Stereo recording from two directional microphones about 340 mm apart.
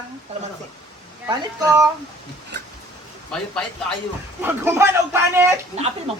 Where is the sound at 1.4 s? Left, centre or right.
Centre.